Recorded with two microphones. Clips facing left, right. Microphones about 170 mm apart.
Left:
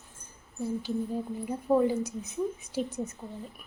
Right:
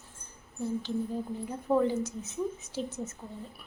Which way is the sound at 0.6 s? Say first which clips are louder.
Left 1 dB; 10° left (ahead or behind).